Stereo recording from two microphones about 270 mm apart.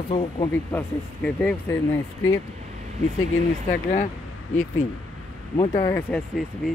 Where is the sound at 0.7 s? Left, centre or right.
Centre.